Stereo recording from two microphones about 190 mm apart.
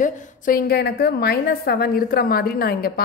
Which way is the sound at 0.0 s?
45° left (ahead or behind).